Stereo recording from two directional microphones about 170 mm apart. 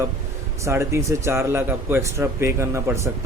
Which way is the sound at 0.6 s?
15° right (ahead or behind).